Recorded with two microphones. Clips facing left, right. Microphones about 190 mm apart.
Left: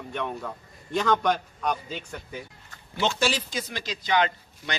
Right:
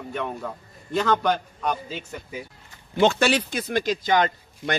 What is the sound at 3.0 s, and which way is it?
Speech, 55° right (ahead or behind).